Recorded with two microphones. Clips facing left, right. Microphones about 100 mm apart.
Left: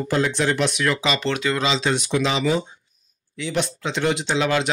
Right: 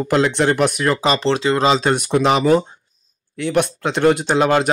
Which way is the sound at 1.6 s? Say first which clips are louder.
Right 6 dB; 50° right (ahead or behind).